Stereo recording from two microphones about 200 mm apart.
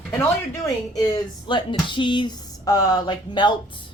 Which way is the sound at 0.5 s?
15° left (ahead or behind).